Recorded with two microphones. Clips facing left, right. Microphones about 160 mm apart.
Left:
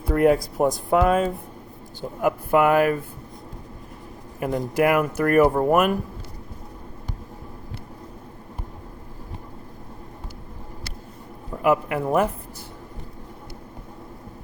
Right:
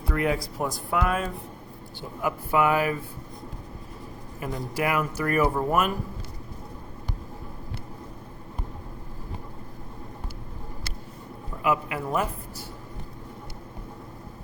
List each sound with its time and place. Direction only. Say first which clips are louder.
0.2 s speech: left 9 dB; 50° left (ahead or behind)
4.4 s speech: left 8 dB; 55° left (ahead or behind)
11.6 s speech: left 6 dB; 50° left (ahead or behind)